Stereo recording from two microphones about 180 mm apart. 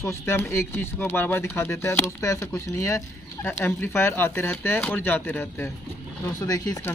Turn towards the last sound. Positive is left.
turn(degrees=20)  # may be behind; listen again after turning